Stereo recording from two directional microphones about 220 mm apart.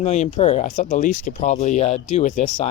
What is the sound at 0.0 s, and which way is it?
Speech, 30° left (ahead or behind).